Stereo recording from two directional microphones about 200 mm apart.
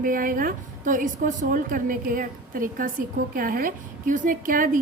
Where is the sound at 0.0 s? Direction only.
45° right (ahead or behind).